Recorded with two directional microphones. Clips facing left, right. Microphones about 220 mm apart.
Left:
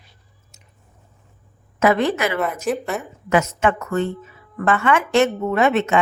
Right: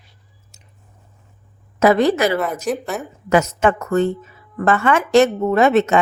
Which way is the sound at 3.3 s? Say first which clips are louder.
Right 3 dB; 40° right (ahead or behind).